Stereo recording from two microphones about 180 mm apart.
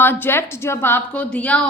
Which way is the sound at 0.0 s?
10° left (ahead or behind).